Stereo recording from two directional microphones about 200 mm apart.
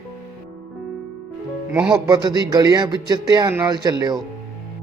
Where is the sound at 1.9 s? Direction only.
20° right (ahead or behind).